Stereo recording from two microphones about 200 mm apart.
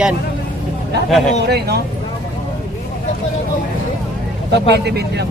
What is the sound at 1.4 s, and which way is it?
Speech, 55° right (ahead or behind).